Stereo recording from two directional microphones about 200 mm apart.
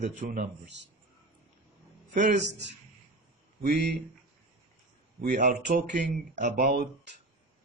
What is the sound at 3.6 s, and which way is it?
Speech, 55° right (ahead or behind).